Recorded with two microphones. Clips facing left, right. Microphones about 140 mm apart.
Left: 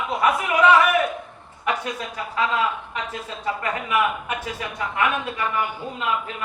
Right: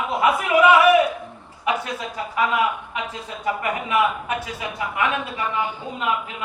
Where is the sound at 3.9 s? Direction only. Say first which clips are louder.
Right 2 dB; 30° right (ahead or behind).